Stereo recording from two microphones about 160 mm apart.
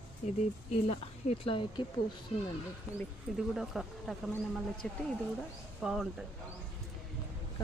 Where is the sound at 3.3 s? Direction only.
5° right (ahead or behind).